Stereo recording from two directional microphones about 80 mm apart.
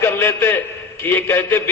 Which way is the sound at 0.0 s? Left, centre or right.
Left.